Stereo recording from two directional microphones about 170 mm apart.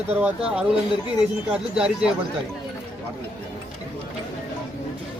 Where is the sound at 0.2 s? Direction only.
5° right (ahead or behind).